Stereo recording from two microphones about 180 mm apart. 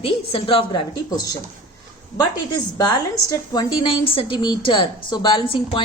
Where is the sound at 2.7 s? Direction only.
20° left (ahead or behind).